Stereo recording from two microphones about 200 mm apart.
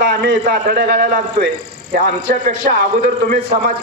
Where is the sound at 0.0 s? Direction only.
55° right (ahead or behind).